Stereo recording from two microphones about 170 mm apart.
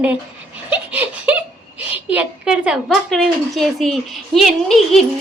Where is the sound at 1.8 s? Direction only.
10° right (ahead or behind).